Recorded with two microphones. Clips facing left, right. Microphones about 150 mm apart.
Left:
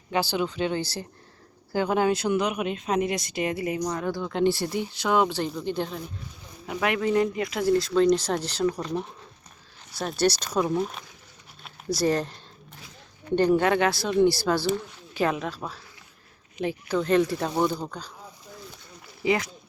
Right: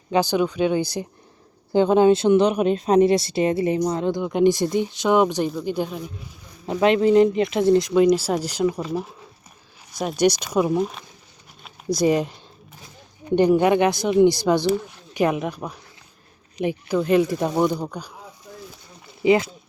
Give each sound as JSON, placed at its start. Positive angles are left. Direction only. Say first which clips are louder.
{"t": 0.1, "sound": "speech", "louder": "right 6 dB", "side_deg": -15}
{"t": 6.7, "sound": "speech", "louder": "right 8 dB", "side_deg": -25}
{"t": 19.2, "sound": "speech", "louder": "right 7 dB", "side_deg": -20}